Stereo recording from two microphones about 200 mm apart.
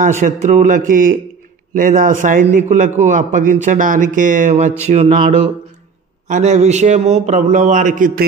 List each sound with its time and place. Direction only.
0.0 s a man's voice: 40° right (ahead or behind)
4.8 s a sound: 30° right (ahead or behind)
6.2 s a man's voice: 35° right (ahead or behind)